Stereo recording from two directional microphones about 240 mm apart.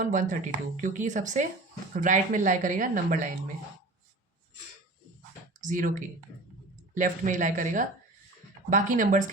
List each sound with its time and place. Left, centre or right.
0.0 s speech: right
5.5 s speech: right